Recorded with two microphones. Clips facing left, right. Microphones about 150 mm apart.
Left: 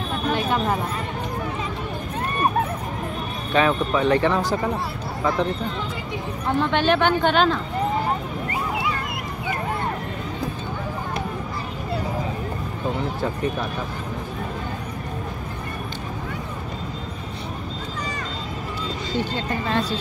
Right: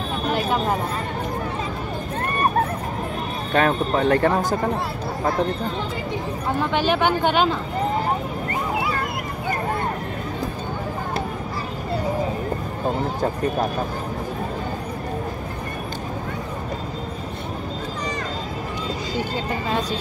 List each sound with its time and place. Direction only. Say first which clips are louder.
3.5 s speech: even; 50° right (ahead or behind)
6.6 s speech: left 1 dB; 10° right (ahead or behind)
19.1 s speech: left 2 dB; 10° right (ahead or behind)